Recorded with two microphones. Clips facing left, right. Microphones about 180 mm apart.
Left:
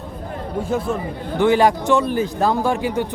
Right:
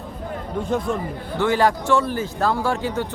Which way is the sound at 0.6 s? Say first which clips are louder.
Left 1 dB; 5° left (ahead or behind).